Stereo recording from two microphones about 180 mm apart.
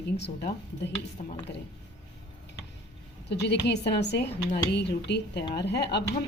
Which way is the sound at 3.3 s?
70° left (ahead or behind).